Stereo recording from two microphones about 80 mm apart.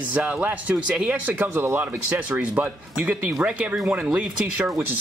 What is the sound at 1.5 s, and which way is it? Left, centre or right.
Speech, right.